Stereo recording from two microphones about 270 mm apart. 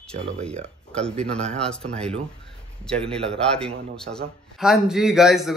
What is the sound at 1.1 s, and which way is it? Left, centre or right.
Speech, right.